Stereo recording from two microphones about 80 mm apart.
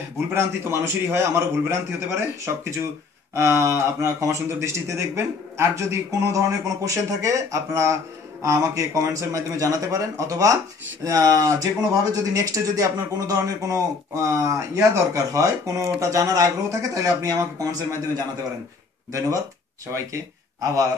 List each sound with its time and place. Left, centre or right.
0.3 s speech: right